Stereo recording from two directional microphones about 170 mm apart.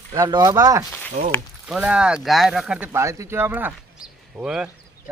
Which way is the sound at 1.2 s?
55° right (ahead or behind).